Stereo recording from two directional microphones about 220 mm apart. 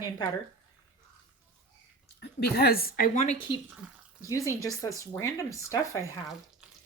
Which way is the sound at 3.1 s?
30° left (ahead or behind).